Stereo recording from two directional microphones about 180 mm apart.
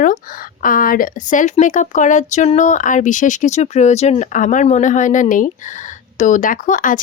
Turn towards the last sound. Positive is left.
turn(degrees=45)  # may be behind; listen again after turning